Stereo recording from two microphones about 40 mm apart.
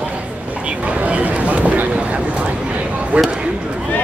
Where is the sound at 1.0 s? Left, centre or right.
Right.